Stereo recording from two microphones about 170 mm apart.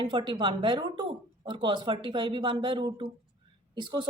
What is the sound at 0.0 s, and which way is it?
Speech, 30° right (ahead or behind).